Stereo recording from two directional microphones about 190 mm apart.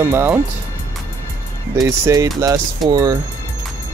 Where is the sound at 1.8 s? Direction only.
15° right (ahead or behind).